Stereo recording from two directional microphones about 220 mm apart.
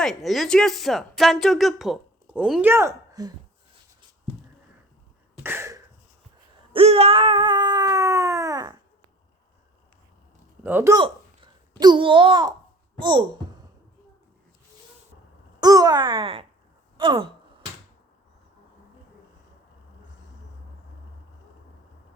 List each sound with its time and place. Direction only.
0.0 s a woman's voice: centre (ahead or behind); by 3.3 s 15° right (ahead or behind)
5.4 s a sound: 10° right (ahead or behind)
6.7 s a sound: 25° right (ahead or behind)
10.6 s a child's voice: 10° right (ahead or behind)
15.6 s a child's voice: 20° right (ahead or behind)
17.0 s wail: 20° right (ahead or behind)